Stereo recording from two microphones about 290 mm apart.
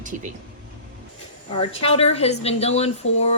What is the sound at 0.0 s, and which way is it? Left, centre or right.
Speech, right.